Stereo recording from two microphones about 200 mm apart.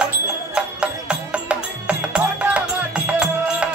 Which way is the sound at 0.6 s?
5° right (ahead or behind).